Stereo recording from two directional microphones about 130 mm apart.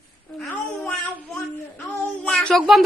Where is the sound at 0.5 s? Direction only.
15° left (ahead or behind).